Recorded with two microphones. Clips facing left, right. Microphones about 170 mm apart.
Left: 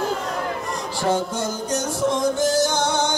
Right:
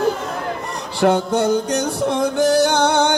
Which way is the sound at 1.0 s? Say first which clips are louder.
Right 7 dB; 65° right (ahead or behind).